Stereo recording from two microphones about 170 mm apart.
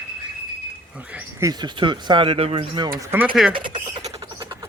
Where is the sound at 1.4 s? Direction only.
25° right (ahead or behind).